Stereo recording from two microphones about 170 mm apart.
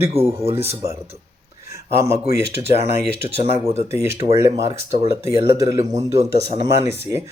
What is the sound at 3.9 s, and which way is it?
Speech, 15° right (ahead or behind).